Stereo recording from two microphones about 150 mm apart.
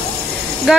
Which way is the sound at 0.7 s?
5° right (ahead or behind).